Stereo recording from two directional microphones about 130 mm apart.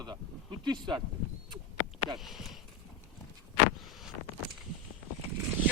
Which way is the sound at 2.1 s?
Centre (ahead or behind).